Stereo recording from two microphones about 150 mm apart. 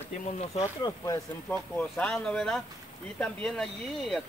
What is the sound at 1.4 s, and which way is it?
Speech, 5° left (ahead or behind).